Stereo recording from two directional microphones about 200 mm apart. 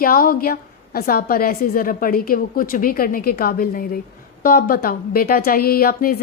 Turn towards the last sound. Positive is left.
turn(degrees=45)  # may be behind; listen again after turning